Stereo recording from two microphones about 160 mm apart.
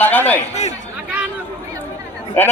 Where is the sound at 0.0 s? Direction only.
10° left (ahead or behind).